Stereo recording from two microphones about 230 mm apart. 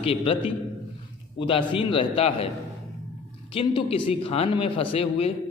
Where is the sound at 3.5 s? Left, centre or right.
Left.